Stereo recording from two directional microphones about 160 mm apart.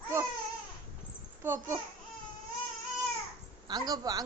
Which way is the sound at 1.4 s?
15° right (ahead or behind).